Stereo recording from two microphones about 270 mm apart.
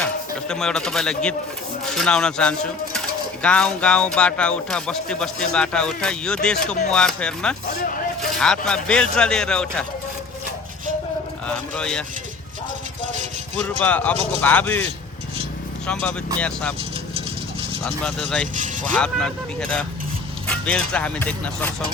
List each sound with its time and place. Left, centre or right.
0.0 s speech: centre
11.4 s speech: centre
13.6 s speech: centre
15.9 s speech: centre
17.8 s speech: centre
18.5 s speech: right
18.9 s speech: centre